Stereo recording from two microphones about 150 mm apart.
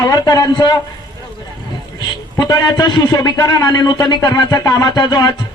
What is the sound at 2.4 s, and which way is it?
A man's voice, 25° left (ahead or behind).